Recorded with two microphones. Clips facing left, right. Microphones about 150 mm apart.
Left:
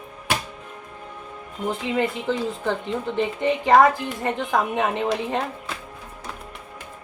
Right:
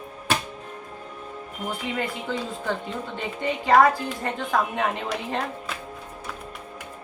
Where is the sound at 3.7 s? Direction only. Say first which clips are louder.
Left 1 dB; 20° left (ahead or behind).